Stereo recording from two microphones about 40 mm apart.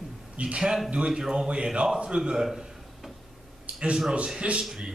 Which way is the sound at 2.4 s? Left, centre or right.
Centre.